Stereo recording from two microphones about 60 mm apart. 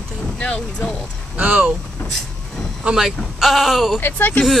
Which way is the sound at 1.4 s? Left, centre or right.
Right.